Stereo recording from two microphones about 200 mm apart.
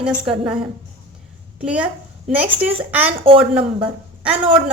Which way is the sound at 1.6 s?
5° right (ahead or behind).